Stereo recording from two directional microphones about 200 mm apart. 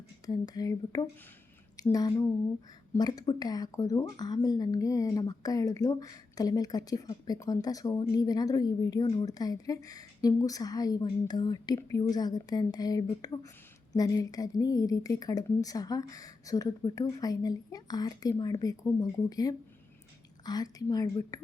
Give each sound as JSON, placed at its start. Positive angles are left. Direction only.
{"t": 0.3, "sound": "a woman's voice", "side_deg": 20}